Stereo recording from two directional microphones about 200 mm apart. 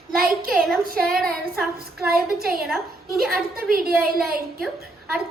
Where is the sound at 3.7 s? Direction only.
50° right (ahead or behind).